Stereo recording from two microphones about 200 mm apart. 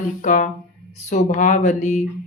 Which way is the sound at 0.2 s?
40° left (ahead or behind).